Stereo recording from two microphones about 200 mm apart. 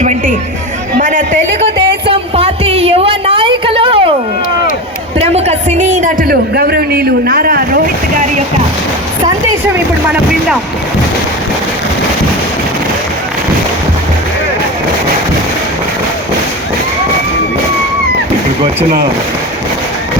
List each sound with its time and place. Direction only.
0.9 s chatter: 40° right (ahead or behind)
2.0 s a sound: 30° right (ahead or behind)
5.2 s a man's voice: 30° right (ahead or behind); by 7.8 s 50° right (ahead or behind)